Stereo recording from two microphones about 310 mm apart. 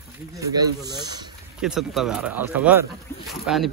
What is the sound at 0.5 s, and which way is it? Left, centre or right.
Speech, centre.